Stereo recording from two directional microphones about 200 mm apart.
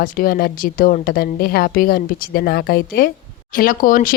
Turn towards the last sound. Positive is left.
turn(degrees=45)  # may be behind; listen again after turning